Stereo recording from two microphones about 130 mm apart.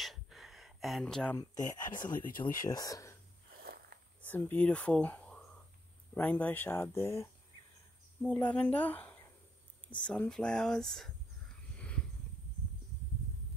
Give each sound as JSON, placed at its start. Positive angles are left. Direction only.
{"t": 0.0, "sound": "a sound", "side_deg": 0}
{"t": 1.6, "sound": "speech", "side_deg": 80}
{"t": 2.4, "sound": "speech", "side_deg": 40}
{"t": 2.7, "sound": "speech", "side_deg": 25}
{"t": 4.2, "sound": "speech", "side_deg": 15}
{"t": 8.2, "sound": "speech", "side_deg": 5}
{"t": 11.7, "sound": "a sound", "side_deg": 10}